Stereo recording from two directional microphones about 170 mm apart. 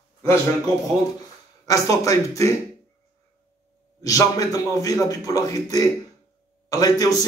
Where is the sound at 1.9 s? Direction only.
20° left (ahead or behind).